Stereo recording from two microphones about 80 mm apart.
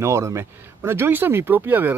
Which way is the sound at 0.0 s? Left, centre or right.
Right.